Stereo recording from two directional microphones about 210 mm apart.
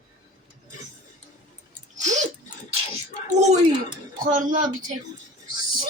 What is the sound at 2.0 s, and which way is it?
Dog, 35° right (ahead or behind).